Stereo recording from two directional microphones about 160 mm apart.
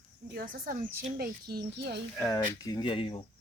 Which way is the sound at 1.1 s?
75° right (ahead or behind).